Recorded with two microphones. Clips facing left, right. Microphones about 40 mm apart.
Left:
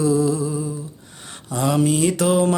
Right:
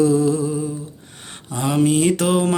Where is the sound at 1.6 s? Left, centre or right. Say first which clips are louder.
Right 1 dB; right.